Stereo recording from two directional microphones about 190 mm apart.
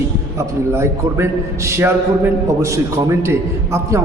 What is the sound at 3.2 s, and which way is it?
Speech, 15° right (ahead or behind).